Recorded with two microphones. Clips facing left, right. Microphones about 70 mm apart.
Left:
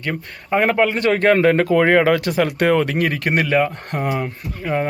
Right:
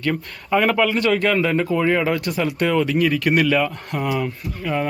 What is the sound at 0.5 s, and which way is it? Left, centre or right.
Speech, left.